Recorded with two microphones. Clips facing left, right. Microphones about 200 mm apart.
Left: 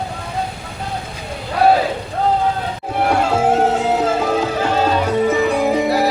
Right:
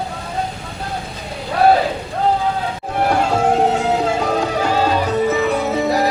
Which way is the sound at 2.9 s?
5° left (ahead or behind).